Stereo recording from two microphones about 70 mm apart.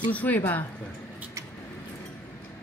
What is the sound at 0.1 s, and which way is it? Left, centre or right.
Speech, left.